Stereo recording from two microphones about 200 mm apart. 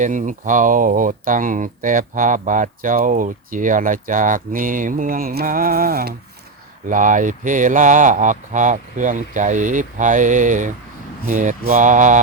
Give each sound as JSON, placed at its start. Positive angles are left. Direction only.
{"t": 0.0, "sound": "speech", "side_deg": -40}